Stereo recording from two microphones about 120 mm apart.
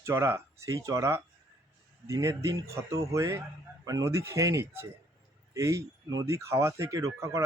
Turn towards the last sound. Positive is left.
turn(degrees=-25)  # may be behind; listen again after turning